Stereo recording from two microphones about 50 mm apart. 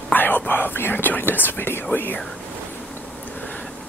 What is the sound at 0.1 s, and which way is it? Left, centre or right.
Speech, left.